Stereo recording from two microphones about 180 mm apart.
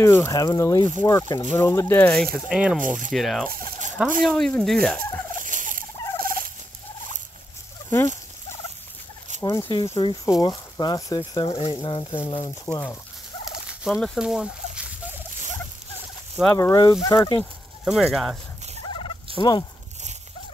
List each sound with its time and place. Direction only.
0.0 s speech: 15° left (ahead or behind)
2.3 s speech: 5° right (ahead or behind)
2.8 s speech: 45° right (ahead or behind)
3.1 s speech: centre (ahead or behind)
3.4 s fowl: 50° right (ahead or behind)
4.2 s speech: 5° left (ahead or behind)
5.3 s turkey: 45° right (ahead or behind)
9.4 s speech: 20° left (ahead or behind)
13.7 s speech: centre (ahead or behind)
16.5 s speech: 20° left (ahead or behind)
17.4 s speech: centre (ahead or behind)
19.3 s speech: 25° left (ahead or behind)